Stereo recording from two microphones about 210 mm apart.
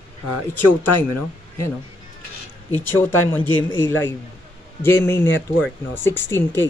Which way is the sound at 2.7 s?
10° left (ahead or behind).